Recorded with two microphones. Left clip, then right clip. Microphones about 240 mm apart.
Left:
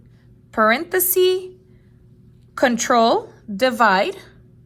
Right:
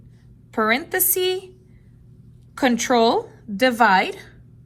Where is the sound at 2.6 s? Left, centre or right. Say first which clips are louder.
Left 2 dB; centre.